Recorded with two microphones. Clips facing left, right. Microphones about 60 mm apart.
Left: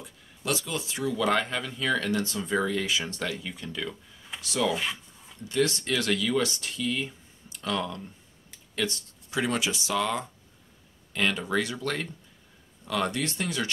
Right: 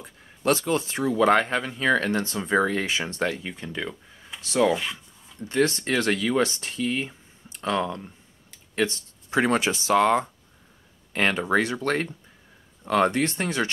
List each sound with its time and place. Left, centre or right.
0.0 s speech: right